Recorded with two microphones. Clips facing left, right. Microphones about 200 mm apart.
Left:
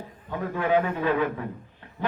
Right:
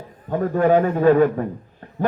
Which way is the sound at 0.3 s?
45° right (ahead or behind).